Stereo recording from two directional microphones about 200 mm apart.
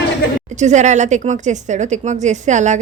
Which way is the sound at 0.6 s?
35° right (ahead or behind).